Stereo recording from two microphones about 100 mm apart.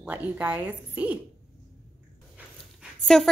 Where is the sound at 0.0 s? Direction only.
15° right (ahead or behind).